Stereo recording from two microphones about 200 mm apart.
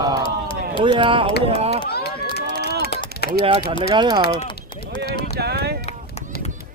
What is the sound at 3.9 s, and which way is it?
Speech, 20° right (ahead or behind).